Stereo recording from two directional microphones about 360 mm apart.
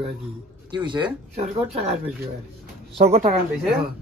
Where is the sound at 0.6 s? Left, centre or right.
Centre.